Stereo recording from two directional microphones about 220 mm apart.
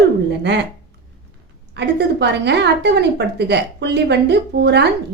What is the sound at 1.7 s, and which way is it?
A woman's voice, 50° right (ahead or behind).